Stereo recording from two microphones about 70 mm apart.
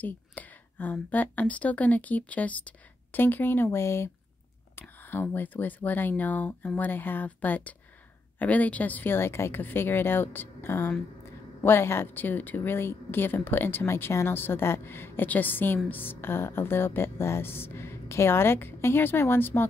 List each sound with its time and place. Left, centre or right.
0.0 s a woman's voice: left